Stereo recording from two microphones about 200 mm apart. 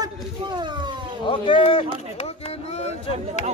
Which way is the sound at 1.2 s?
25° left (ahead or behind).